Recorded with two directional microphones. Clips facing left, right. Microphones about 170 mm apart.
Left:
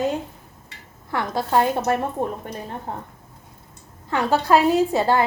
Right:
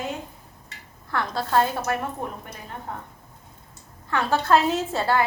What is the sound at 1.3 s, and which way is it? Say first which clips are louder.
Speech: left 3 dB; 15° left (ahead or behind).